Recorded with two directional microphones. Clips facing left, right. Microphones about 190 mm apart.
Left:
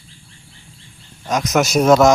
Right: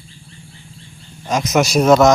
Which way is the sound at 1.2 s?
Centre (ahead or behind).